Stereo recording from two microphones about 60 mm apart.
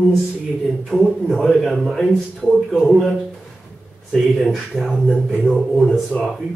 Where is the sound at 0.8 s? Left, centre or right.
Centre.